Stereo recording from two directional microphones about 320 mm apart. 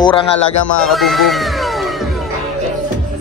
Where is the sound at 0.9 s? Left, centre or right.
Centre.